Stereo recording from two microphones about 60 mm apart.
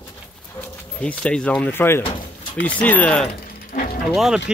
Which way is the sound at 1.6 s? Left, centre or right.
Left.